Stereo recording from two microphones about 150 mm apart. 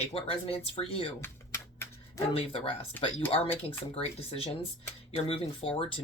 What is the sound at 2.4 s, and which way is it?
Speech, 35° left (ahead or behind).